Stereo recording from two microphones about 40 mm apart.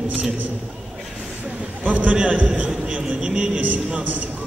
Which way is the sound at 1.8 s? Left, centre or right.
Right.